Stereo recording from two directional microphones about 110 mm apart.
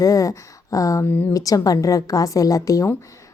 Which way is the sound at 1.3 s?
30° left (ahead or behind).